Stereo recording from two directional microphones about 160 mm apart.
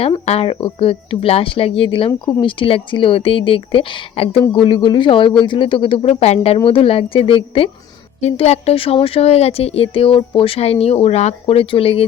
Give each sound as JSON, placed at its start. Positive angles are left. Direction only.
{"t": 0.0, "sound": "speech", "side_deg": 35}